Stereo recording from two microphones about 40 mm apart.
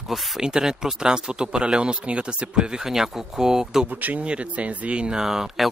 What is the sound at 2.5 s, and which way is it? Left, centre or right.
Speech, centre.